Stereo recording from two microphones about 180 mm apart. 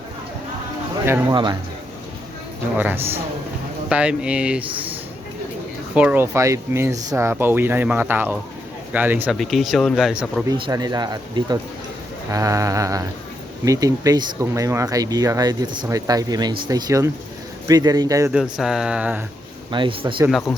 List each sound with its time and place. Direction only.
1.3 s speech: 25° right (ahead or behind)
2.7 s speech: 10° right (ahead or behind)
5.9 s speech: 5° right (ahead or behind)
9.3 s speech: centre (ahead or behind)
10.7 s speech: 20° right (ahead or behind)
18.5 s speech: 5° right (ahead or behind)
19.7 s speech: 30° right (ahead or behind)